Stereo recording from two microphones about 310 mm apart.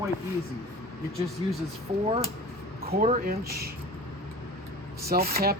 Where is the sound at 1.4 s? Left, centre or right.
Centre.